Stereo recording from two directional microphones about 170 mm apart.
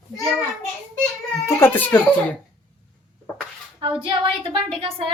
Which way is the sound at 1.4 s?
15° left (ahead or behind).